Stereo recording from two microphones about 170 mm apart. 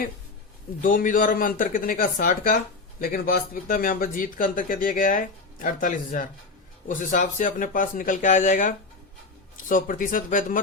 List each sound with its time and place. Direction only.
0.8 s speech: 55° left (ahead or behind)